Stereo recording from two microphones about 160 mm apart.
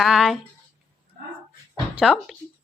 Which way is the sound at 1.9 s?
5° right (ahead or behind).